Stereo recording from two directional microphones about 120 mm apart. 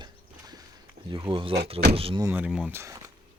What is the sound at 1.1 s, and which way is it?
Speech, 40° right (ahead or behind).